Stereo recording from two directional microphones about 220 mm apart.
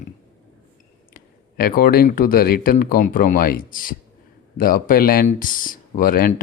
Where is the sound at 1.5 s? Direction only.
40° left (ahead or behind).